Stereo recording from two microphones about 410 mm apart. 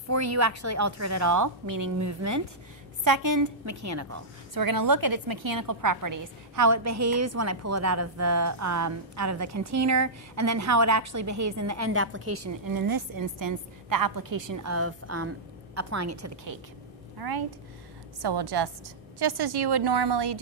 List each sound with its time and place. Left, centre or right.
0.1 s a woman's voice: right
4.6 s a woman's voice: right
12.6 s a woman's voice: right
14.5 s a woman's voice: right
17.2 s a woman's voice: right